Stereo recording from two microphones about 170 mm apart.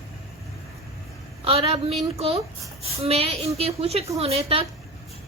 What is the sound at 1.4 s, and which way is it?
Speech, 35° right (ahead or behind).